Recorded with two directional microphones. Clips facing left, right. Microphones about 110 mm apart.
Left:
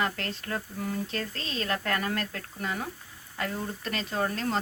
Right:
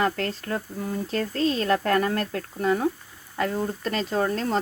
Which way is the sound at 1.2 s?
45° right (ahead or behind).